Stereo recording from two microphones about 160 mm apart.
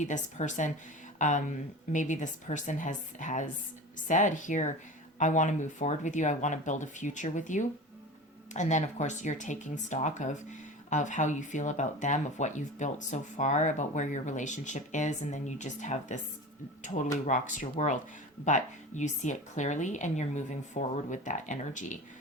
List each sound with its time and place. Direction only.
0.0 s speech: 50° left (ahead or behind)
17.2 s speech: 50° left (ahead or behind)